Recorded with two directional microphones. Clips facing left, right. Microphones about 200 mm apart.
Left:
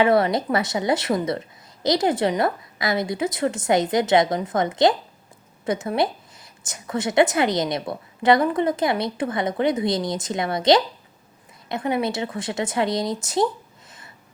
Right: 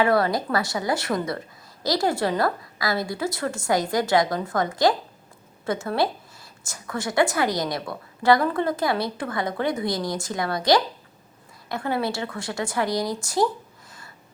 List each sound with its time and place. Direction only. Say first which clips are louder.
0.0 s a woman's voice: left 3 dB; 20° left (ahead or behind)